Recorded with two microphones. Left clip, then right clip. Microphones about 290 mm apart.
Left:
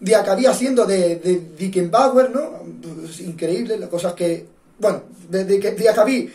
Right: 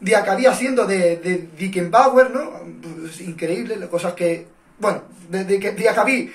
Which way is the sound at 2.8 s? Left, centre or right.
Centre.